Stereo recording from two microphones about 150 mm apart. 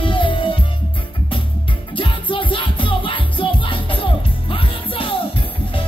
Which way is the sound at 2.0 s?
35° left (ahead or behind).